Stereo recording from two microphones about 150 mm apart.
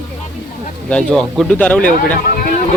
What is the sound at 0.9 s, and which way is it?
Speech, 5° left (ahead or behind).